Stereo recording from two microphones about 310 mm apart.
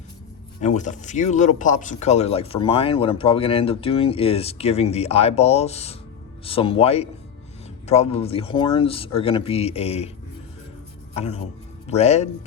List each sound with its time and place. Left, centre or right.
0.6 s speech: left
11.1 s speech: centre